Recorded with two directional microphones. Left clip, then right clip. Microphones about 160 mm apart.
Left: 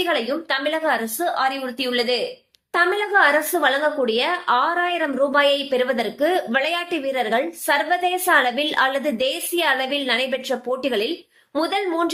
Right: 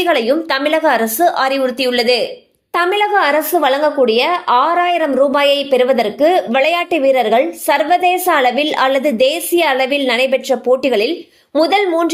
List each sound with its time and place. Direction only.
0.0 s speech: 50° right (ahead or behind)